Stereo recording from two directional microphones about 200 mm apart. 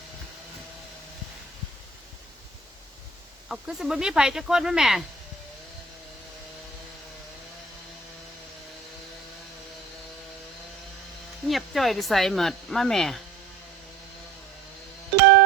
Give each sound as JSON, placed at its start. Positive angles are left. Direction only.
{"t": 3.5, "sound": "speech", "side_deg": 0}
{"t": 11.4, "sound": "speech", "side_deg": 0}
{"t": 15.2, "sound": "music", "side_deg": -60}